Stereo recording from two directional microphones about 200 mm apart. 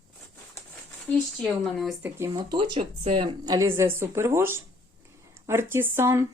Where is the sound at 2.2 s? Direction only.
20° right (ahead or behind).